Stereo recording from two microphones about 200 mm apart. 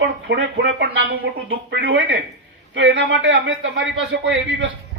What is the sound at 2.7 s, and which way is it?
A man's voice, 70° right (ahead or behind).